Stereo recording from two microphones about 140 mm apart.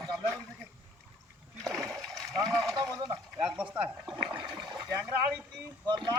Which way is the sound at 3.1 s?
5° right (ahead or behind).